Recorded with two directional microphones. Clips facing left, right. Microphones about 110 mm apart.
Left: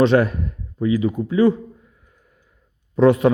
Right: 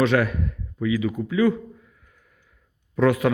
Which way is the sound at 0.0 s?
30° left (ahead or behind).